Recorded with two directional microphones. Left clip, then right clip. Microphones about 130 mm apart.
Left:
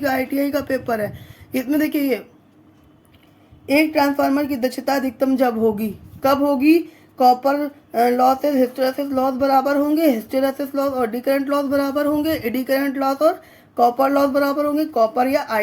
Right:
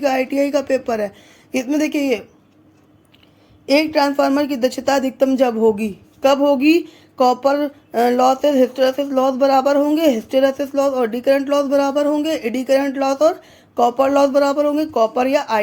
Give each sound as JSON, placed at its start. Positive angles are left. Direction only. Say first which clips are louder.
{"t": 0.0, "sound": "speech", "louder": "right 3 dB", "side_deg": -30}
{"t": 3.7, "sound": "a woman's voice", "louder": "right 1 dB", "side_deg": -35}